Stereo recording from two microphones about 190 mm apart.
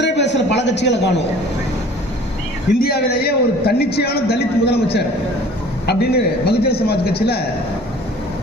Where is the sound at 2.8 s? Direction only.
55° left (ahead or behind).